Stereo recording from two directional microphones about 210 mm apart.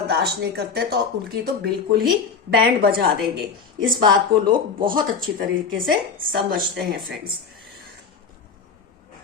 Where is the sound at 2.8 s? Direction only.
45° right (ahead or behind).